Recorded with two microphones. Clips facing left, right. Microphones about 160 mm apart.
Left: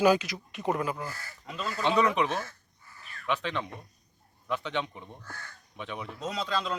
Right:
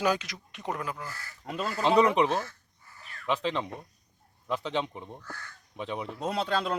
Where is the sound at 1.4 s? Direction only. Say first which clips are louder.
Right 3 dB; 55° right (ahead or behind).